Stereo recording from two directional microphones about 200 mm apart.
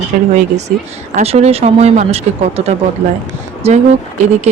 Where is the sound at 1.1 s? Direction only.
30° right (ahead or behind).